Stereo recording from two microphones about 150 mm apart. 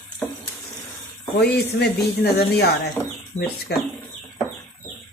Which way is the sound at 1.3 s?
90° left.